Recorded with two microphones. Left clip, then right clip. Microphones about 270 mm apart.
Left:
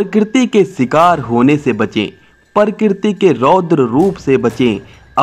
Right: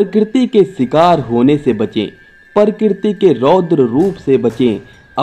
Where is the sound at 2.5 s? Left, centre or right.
Left.